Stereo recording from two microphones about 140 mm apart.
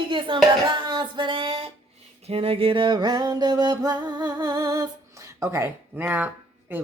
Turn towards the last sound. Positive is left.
turn(degrees=-15)  # may be behind; listen again after turning